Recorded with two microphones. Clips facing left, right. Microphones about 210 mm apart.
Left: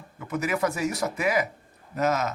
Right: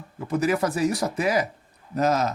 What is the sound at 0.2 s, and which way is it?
Speech, 35° right (ahead or behind).